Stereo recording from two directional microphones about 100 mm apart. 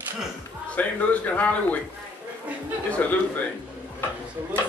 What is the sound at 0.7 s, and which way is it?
A man's voice, 15° left (ahead or behind).